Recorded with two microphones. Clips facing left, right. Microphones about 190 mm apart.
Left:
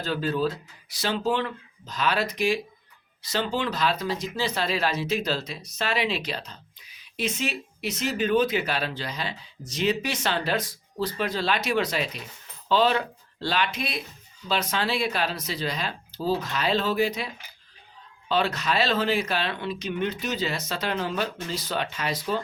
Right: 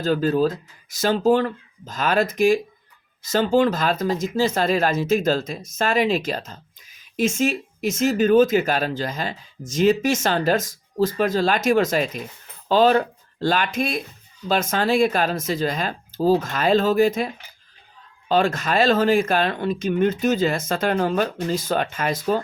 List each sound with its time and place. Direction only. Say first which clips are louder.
0.0 s speech: right 7 dB; 45° right (ahead or behind)